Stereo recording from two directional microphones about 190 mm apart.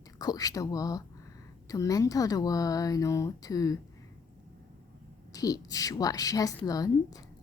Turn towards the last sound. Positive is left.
turn(degrees=20)  # may be behind; listen again after turning